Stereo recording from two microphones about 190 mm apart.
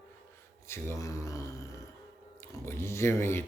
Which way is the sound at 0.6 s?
15° left (ahead or behind).